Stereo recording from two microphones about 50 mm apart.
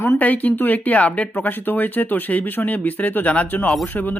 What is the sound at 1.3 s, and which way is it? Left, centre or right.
Speech, left.